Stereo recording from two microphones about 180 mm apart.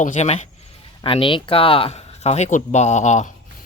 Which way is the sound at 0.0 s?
40° left (ahead or behind).